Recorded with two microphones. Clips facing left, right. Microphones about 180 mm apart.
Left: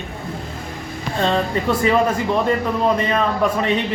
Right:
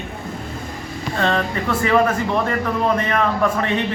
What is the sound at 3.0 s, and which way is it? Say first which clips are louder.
Speech: even; 15° left (ahead or behind).